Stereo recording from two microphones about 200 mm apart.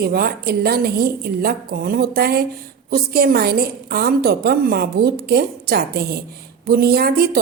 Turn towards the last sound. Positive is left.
turn(degrees=-50)  # may be behind; listen again after turning